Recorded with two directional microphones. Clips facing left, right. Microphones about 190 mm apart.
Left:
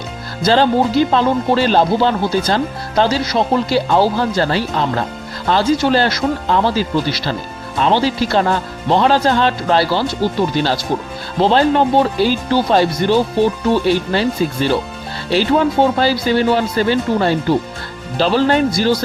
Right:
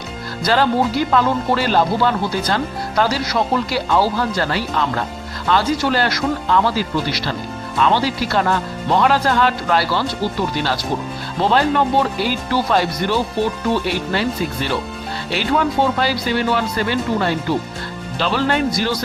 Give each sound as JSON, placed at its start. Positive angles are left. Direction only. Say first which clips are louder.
{"t": 0.4, "sound": "speech", "louder": "left 3 dB", "side_deg": 25}